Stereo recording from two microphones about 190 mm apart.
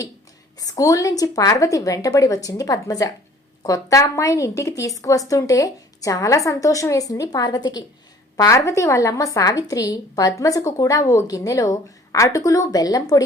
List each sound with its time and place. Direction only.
0.6 s a woman's voice: 20° left (ahead or behind)